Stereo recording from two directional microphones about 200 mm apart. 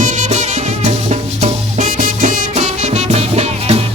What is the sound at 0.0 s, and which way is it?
Music, 35° right (ahead or behind).